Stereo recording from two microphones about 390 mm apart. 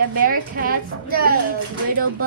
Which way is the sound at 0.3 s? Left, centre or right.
Right.